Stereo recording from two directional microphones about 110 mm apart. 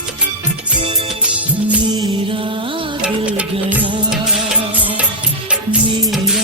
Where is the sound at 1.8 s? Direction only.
40° right (ahead or behind).